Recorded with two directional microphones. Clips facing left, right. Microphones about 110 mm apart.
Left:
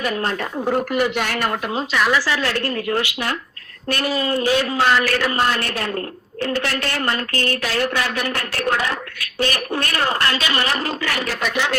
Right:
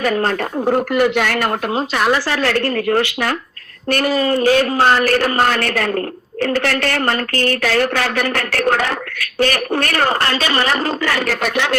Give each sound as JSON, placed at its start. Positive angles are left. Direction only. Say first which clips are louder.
{"t": 0.0, "sound": "speech", "louder": "right 5 dB", "side_deg": -50}
{"t": 1.1, "sound": "a woman's voice", "louder": "right 4 dB", "side_deg": -60}
{"t": 8.6, "sound": "a woman's voice", "louder": "right 3 dB", "side_deg": -60}
{"t": 11.3, "sound": "a woman's voice", "louder": "right 4 dB", "side_deg": -60}